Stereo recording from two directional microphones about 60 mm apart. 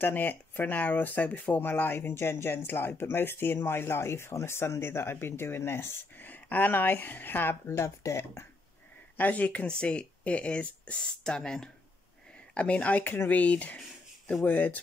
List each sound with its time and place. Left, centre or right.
0.0 s speech: left
6.1 s speech: left
9.1 s speech: left; by 11.7 s centre
12.5 s speech: left